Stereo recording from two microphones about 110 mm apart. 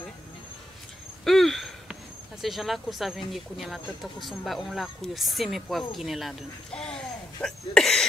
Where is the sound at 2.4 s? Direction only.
Centre (ahead or behind).